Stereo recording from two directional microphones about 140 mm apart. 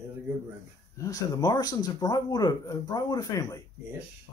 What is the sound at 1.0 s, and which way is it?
Speech, 25° left (ahead or behind).